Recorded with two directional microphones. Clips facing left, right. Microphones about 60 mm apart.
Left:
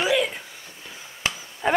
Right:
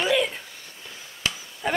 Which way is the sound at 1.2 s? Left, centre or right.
Left.